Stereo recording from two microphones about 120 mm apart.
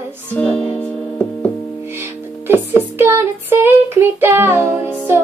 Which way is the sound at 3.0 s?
20° right (ahead or behind).